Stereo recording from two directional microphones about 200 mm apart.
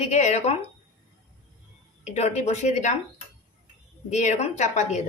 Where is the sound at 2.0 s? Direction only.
35° left (ahead or behind).